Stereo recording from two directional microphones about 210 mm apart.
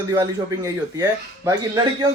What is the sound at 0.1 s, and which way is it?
Speech, 20° right (ahead or behind).